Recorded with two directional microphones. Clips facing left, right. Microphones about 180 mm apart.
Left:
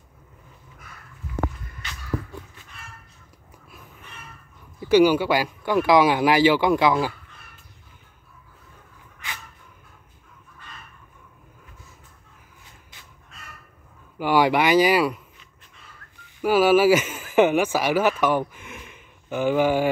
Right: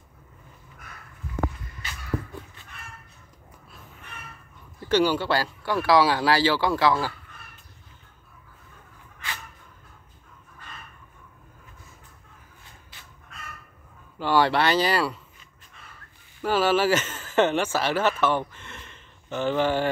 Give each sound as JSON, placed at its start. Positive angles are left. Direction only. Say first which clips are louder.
{"t": 4.7, "sound": "speech", "louder": "left 6 dB", "side_deg": 10}
{"t": 14.1, "sound": "speech", "louder": "left 2 dB", "side_deg": 10}
{"t": 16.3, "sound": "speech", "louder": "left 5 dB", "side_deg": 10}